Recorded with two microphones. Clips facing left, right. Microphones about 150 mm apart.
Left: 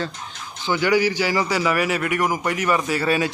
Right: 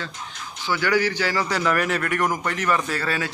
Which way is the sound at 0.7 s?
15° left (ahead or behind).